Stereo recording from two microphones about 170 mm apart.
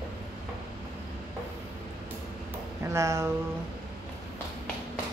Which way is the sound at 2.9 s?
15° right (ahead or behind).